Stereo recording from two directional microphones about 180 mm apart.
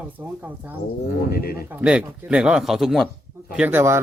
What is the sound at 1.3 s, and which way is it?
Speech, 60° left (ahead or behind).